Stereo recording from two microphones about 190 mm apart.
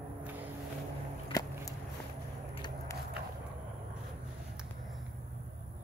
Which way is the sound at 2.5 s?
20° left (ahead or behind).